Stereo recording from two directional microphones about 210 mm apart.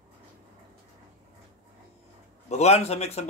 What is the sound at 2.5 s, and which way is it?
Speech, 30° left (ahead or behind).